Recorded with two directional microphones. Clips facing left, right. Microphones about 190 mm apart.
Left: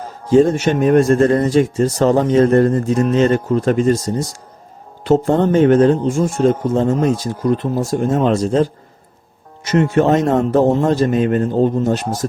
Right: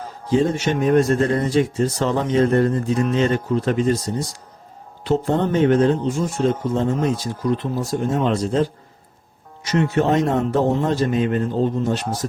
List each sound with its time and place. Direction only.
0.3 s speech: 45° left (ahead or behind)
9.7 s speech: 50° left (ahead or behind)